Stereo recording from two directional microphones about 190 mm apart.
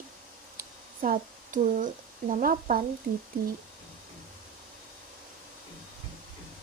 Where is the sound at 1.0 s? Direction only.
45° right (ahead or behind).